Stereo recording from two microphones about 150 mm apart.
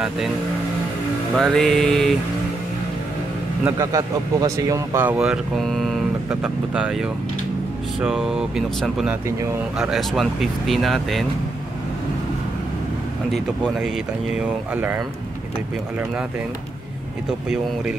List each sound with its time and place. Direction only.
1.3 s speech: centre (ahead or behind)
3.7 s speech: 20° right (ahead or behind); by 11.2 s centre (ahead or behind)
13.9 s speech: 10° right (ahead or behind)
17.5 s speech: 5° right (ahead or behind)